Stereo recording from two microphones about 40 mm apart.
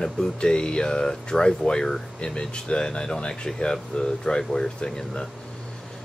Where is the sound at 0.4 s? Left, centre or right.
Left.